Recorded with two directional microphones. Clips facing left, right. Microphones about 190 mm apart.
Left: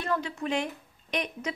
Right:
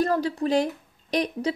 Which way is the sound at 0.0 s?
35° right (ahead or behind).